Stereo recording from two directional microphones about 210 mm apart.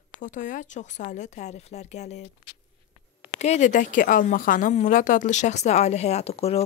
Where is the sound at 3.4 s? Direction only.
35° left (ahead or behind).